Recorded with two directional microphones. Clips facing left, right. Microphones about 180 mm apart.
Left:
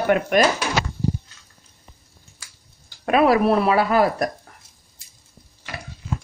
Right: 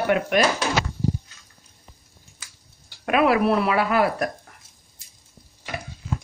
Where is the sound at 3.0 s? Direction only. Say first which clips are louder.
Left 2 dB; 35° left (ahead or behind).